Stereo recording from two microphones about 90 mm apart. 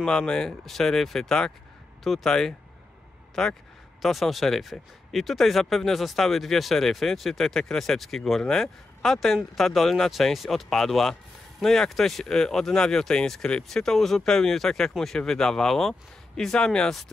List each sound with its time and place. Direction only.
0.0 s speech: 10° left (ahead or behind)